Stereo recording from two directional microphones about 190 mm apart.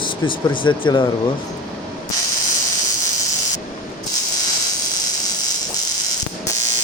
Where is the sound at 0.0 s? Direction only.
25° left (ahead or behind).